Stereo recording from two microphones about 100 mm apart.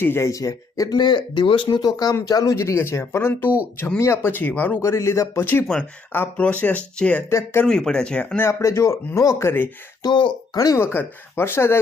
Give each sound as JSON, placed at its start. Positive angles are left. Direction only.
{"t": 0.0, "sound": "speech", "side_deg": 25}
{"t": 7.3, "sound": "speech", "side_deg": 25}
{"t": 7.6, "sound": "speech", "side_deg": 5}
{"t": 8.4, "sound": "speech", "side_deg": 25}
{"t": 10.0, "sound": "speech", "side_deg": 50}
{"t": 10.8, "sound": "speech", "side_deg": 25}